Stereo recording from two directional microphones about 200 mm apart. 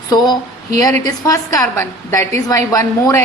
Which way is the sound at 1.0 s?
15° left (ahead or behind).